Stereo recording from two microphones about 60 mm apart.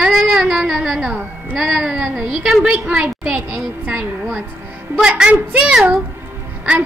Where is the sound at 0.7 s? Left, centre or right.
Centre.